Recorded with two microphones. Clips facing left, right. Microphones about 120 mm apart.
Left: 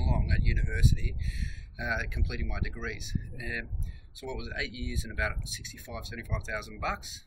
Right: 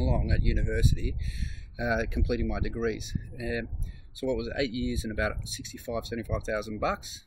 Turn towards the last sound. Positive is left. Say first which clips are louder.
# right 5 dB
turn(degrees=-15)  # may be behind; listen again after turning